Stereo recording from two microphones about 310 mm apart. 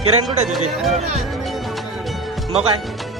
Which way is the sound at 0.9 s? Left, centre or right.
Right.